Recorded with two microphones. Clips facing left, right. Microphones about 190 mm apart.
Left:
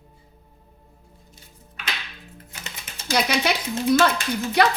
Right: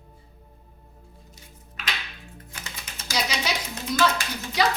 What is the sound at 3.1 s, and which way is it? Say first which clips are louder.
Speech: left 6 dB; 60° left (ahead or behind).